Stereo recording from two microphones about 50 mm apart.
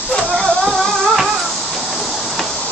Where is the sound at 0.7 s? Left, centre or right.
Centre.